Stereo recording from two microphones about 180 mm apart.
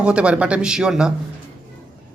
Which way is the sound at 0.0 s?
5° right (ahead or behind).